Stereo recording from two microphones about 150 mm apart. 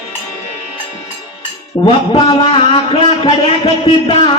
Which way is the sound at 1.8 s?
35° left (ahead or behind).